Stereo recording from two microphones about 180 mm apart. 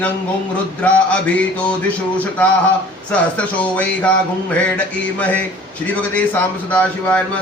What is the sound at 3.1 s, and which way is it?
Speech, 10° left (ahead or behind).